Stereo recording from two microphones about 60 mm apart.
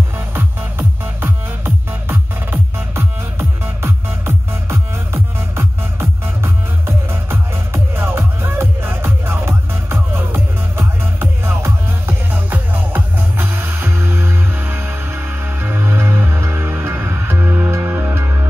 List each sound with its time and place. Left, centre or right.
0.3 s music: right
12.3 s music: right